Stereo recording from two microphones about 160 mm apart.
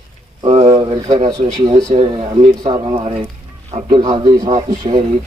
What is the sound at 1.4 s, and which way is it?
Speech, 50° right (ahead or behind).